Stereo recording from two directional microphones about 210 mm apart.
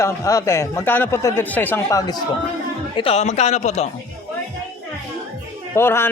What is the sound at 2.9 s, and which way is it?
Speech, 30° left (ahead or behind).